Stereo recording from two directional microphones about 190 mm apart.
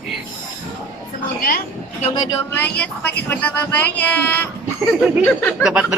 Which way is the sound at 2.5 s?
10° left (ahead or behind).